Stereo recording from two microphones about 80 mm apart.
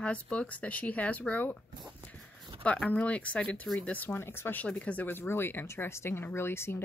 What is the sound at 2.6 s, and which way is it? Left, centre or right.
Speech, centre.